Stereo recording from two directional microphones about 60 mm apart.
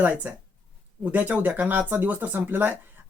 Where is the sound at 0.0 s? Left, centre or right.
Right.